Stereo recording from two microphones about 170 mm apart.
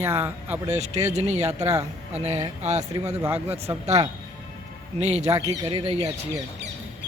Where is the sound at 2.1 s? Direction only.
40° right (ahead or behind).